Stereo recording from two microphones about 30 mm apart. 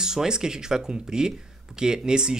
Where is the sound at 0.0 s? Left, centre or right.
Right.